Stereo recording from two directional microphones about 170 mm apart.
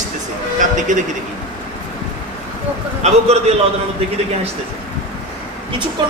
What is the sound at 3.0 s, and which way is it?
Speech, 40° right (ahead or behind).